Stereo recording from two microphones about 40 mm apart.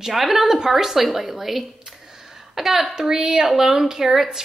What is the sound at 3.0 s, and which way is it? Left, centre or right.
A woman's voice, centre.